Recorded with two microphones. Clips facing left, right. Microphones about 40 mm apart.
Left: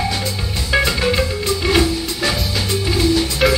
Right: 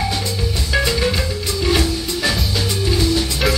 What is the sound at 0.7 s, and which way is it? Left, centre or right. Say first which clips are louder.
Music: left 2 dB; centre.